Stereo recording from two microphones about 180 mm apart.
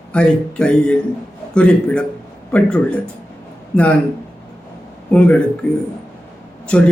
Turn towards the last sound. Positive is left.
turn(degrees=5)  # may be behind; listen again after turning